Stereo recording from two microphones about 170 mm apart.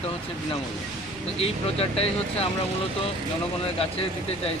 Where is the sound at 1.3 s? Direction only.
35° left (ahead or behind).